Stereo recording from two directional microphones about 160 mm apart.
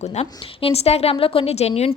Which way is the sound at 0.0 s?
40° left (ahead or behind).